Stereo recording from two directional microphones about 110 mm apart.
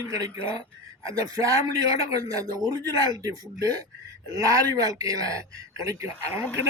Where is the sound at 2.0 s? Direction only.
30° right (ahead or behind).